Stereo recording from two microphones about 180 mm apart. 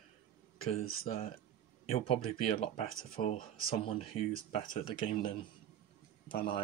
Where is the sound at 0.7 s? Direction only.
35° left (ahead or behind).